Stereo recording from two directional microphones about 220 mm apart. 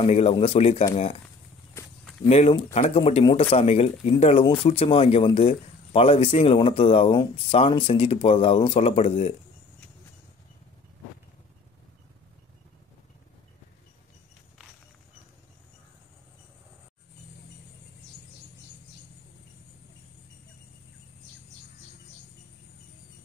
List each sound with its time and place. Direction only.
0.0 s speech: 30° left (ahead or behind)
2.2 s speech: 25° left (ahead or behind)